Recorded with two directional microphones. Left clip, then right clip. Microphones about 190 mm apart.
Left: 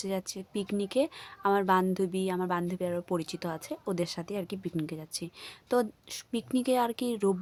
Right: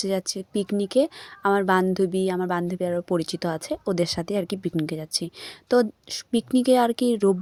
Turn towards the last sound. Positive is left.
turn(degrees=-25)  # may be behind; listen again after turning